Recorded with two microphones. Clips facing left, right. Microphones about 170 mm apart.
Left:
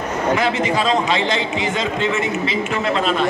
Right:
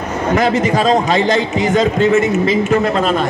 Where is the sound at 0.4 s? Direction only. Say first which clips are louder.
Right 5 dB; 40° right (ahead or behind).